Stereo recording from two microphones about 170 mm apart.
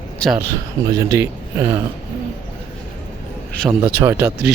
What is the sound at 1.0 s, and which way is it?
Speech, 15° right (ahead or behind).